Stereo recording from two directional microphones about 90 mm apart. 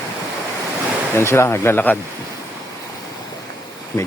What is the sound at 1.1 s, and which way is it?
Speech, 30° left (ahead or behind).